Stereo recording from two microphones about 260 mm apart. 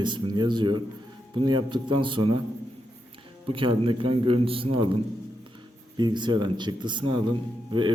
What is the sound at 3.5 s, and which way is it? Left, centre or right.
Speech, centre.